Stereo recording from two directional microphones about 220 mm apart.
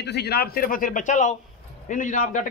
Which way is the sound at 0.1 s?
50° left (ahead or behind).